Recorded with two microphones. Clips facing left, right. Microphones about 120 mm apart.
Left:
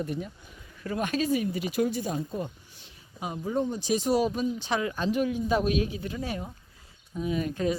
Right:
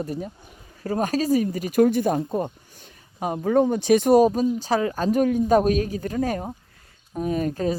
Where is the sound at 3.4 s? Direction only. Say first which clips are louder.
Right 9 dB; 70° right (ahead or behind).